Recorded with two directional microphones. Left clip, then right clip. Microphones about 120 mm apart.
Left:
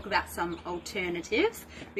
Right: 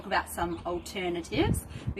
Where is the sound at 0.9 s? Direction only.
30° right (ahead or behind).